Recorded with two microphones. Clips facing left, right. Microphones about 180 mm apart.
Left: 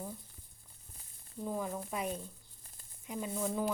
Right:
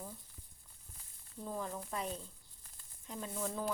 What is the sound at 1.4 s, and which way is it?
Speech, 10° left (ahead or behind).